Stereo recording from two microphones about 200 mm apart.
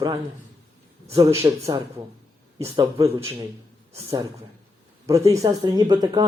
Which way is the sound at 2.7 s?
15° right (ahead or behind).